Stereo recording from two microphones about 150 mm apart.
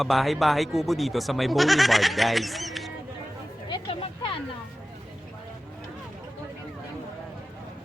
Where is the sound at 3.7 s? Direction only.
35° left (ahead or behind).